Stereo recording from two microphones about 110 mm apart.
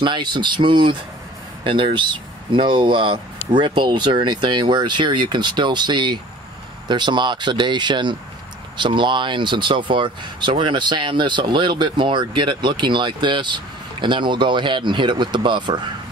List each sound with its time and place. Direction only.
0.0 s speech: 45° right (ahead or behind)